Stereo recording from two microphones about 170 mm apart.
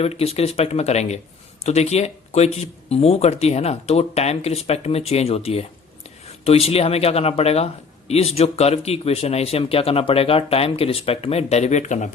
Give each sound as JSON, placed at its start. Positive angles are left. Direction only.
{"t": 0.0, "sound": "speech", "side_deg": 35}